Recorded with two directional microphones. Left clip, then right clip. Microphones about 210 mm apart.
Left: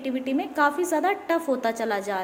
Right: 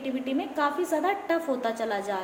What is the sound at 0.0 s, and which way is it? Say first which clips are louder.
A woman's voice: left 3 dB; 35° left (ahead or behind).